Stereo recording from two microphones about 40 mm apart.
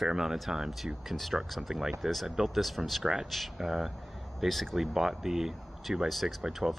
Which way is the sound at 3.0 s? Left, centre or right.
Centre.